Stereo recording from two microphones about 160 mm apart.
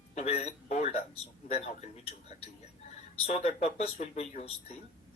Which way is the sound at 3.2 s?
40° left (ahead or behind).